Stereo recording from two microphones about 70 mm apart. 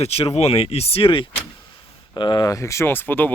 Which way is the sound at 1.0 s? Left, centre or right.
Left.